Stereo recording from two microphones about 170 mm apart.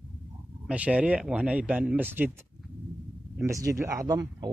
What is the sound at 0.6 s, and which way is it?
Speech, 5° right (ahead or behind).